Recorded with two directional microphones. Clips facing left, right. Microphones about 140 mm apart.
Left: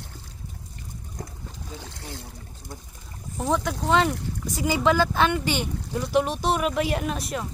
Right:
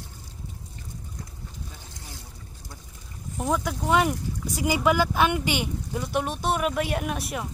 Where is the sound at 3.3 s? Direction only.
10° right (ahead or behind).